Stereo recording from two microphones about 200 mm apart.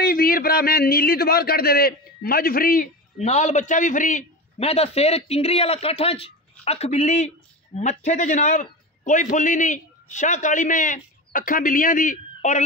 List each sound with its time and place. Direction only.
0.0 s a man's voice: 50° left (ahead or behind)